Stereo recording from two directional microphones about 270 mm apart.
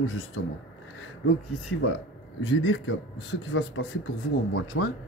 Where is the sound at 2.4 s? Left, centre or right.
Left.